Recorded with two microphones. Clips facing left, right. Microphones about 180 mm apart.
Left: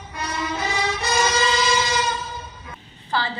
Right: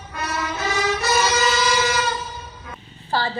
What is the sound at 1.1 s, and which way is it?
Train, 25° left (ahead or behind).